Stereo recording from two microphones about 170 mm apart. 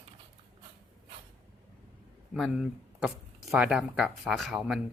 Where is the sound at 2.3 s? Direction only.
Centre (ahead or behind).